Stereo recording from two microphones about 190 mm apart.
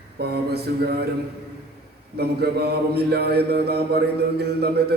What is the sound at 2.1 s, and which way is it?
Speech, 55° right (ahead or behind).